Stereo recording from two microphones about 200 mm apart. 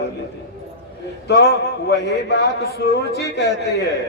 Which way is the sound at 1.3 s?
55° left (ahead or behind).